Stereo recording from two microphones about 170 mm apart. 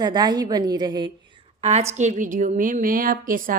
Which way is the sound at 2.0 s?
45° right (ahead or behind).